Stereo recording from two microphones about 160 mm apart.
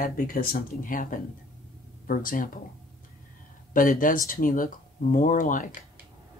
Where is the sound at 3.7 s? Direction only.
60° left (ahead or behind).